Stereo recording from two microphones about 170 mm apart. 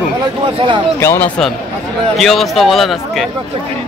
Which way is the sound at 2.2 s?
Centre (ahead or behind).